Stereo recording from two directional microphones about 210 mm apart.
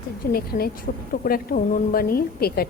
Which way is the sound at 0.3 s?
45° left (ahead or behind).